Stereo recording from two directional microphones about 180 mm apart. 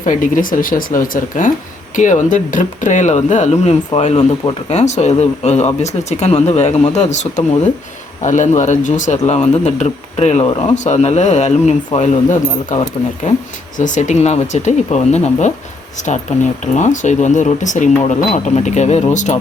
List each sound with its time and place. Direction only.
0.0 s speech: 45° left (ahead or behind)